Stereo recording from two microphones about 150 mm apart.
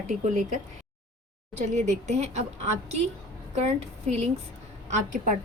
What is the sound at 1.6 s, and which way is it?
Speech, 50° right (ahead or behind).